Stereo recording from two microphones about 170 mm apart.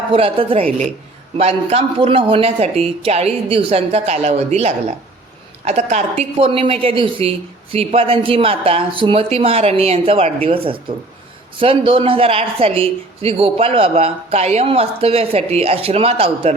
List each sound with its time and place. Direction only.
0.1 s a woman's voice: 30° right (ahead or behind)